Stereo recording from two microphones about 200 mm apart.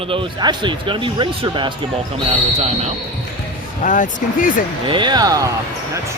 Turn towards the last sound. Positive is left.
turn(degrees=-15)  # may be behind; listen again after turning